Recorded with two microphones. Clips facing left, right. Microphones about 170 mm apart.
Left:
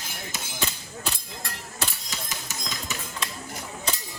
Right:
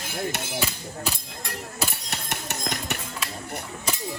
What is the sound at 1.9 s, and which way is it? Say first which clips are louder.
Typewriter: right 4 dB; 65° right (ahead or behind).